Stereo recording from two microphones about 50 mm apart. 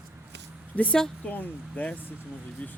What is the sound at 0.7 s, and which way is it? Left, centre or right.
Speech, left.